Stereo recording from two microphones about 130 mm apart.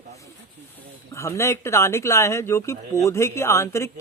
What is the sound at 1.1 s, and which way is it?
Speech, 20° left (ahead or behind).